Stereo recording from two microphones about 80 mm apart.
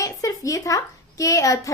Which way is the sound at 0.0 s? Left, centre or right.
Left.